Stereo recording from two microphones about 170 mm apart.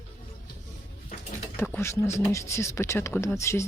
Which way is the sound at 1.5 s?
15° left (ahead or behind).